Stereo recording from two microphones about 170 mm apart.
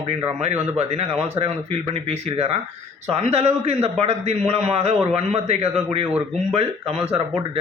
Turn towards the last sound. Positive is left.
turn(degrees=-40)  # may be behind; listen again after turning